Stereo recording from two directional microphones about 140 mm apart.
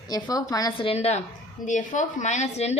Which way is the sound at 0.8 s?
45° left (ahead or behind).